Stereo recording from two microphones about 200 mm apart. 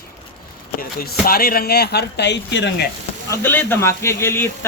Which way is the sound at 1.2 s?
50° left (ahead or behind).